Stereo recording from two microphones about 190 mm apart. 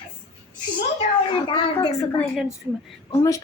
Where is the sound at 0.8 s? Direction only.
30° left (ahead or behind).